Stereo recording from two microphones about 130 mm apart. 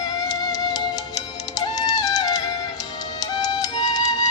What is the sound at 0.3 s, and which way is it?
Music, 30° left (ahead or behind).